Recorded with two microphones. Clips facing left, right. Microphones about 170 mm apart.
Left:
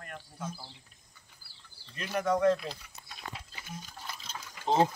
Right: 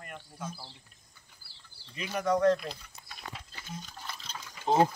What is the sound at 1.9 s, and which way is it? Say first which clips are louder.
Speech: right 1 dB; centre (ahead or behind).